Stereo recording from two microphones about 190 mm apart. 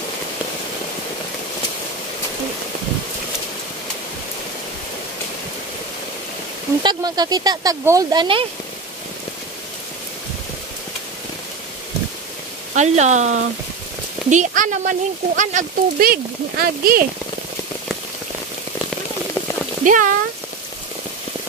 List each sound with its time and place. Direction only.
6.8 s speech: 20° right (ahead or behind)
12.7 s speech: 35° right (ahead or behind)
19.8 s speech: 45° right (ahead or behind)